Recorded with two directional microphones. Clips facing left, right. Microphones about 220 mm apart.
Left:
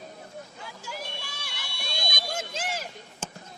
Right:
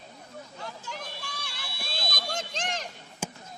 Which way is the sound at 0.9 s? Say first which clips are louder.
Left 1 dB; 5° left (ahead or behind).